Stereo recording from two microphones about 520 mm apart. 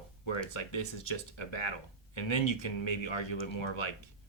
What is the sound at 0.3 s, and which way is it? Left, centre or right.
Speech, left.